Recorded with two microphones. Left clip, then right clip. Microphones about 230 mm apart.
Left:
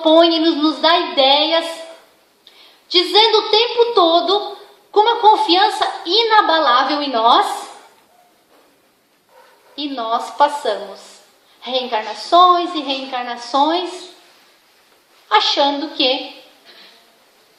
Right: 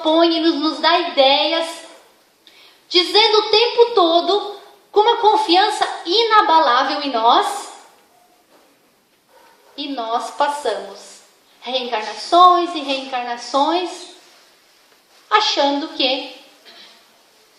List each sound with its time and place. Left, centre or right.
0.0 s a woman's voice: left
2.9 s a woman's voice: left
9.7 s a woman's voice: left
15.3 s a woman's voice: left